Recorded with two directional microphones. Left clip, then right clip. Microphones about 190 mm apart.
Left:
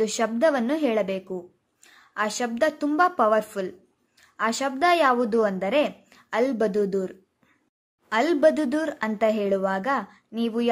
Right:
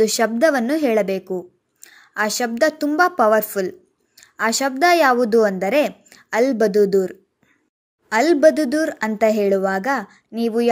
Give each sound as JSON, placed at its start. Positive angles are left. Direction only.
{"t": 0.0, "sound": "a woman's voice", "side_deg": -20}